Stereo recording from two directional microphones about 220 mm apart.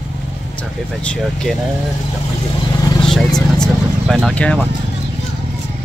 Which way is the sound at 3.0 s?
Centre (ahead or behind).